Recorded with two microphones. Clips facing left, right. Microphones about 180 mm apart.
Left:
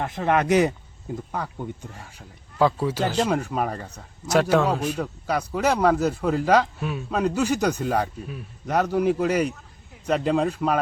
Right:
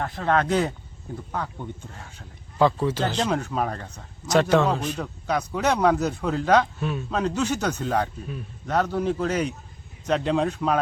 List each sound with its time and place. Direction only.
0.0 s a man's voice: 20° left (ahead or behind)